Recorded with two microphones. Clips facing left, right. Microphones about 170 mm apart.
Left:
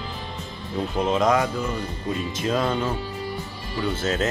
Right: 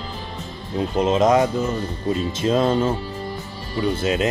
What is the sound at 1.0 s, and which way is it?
Speech, 20° right (ahead or behind).